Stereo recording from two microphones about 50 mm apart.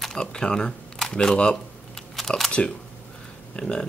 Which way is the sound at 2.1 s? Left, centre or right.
Centre.